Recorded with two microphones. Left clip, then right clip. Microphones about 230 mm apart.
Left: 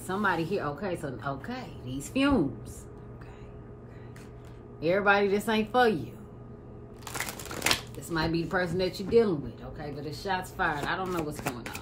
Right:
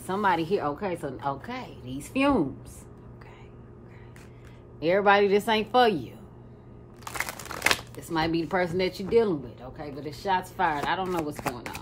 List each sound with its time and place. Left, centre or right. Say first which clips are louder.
0.0 s a woman's voice: right 3 dB; right
4.7 s a woman's voice: right 3 dB; right
7.1 s a sound: right 3 dB; right
8.1 s a woman's voice: right 3 dB; right
10.3 s a woman's voice: right 4 dB; right